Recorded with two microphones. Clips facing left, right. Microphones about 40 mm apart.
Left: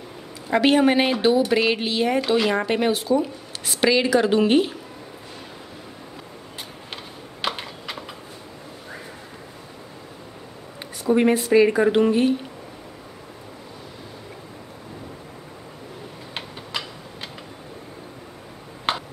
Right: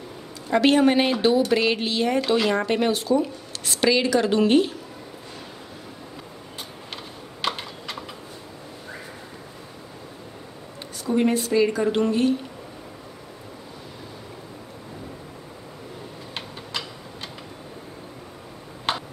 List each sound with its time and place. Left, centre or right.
0.5 s speech: centre
7.4 s typing: centre
11.1 s speech: centre
16.3 s a sound: centre
18.9 s tick-tock: centre